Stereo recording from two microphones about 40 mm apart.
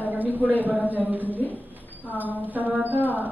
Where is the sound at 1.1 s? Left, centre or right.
Right.